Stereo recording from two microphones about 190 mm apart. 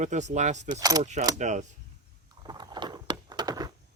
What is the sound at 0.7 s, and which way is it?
Keys jangling, 20° right (ahead or behind).